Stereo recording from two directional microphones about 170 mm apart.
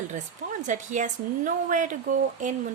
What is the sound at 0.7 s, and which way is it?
A woman's voice, 50° right (ahead or behind).